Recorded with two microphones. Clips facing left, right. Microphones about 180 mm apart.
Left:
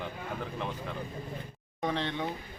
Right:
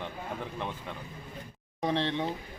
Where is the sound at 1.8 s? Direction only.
30° right (ahead or behind).